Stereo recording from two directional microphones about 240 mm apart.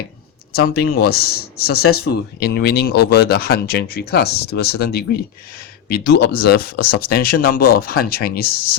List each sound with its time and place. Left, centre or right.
0.8 s speech: left